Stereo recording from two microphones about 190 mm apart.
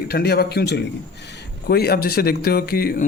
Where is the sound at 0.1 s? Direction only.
55° left (ahead or behind).